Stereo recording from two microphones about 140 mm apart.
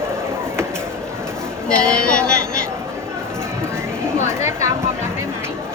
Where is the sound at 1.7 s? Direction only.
5° left (ahead or behind).